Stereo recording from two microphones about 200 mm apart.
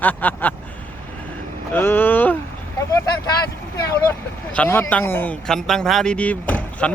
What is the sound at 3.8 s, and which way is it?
Vehicle, 15° left (ahead or behind).